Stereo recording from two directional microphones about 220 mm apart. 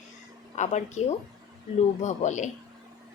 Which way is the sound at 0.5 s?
30° left (ahead or behind).